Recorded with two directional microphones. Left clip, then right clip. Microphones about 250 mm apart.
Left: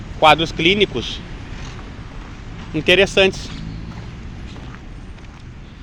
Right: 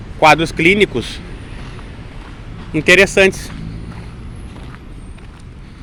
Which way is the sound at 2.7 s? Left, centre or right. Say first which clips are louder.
Right 4 dB; centre.